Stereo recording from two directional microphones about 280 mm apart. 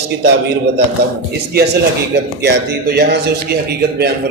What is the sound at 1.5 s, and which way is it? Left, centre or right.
A man's voice, right.